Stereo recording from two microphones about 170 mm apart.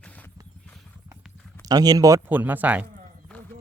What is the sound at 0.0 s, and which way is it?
Vehicle, 10° left (ahead or behind).